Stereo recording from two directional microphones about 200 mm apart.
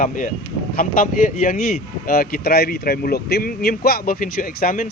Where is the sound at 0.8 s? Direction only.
45° left (ahead or behind).